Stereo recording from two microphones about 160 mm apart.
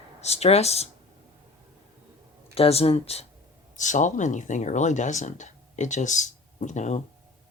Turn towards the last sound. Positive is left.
turn(degrees=45)  # may be behind; listen again after turning